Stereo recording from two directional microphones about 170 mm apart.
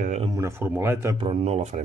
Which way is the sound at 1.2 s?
35° right (ahead or behind).